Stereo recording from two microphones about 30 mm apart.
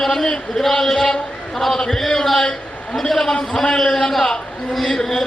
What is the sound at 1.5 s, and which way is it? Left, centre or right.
A man's voice, centre.